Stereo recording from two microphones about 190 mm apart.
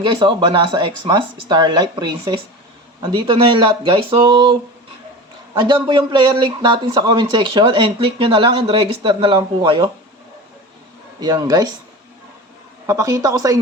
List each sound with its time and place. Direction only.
0.0 s speech: 25° right (ahead or behind)
5.5 s speech: 25° right (ahead or behind)
11.2 s speech: 20° right (ahead or behind)
12.9 s a woman's voice: 15° right (ahead or behind)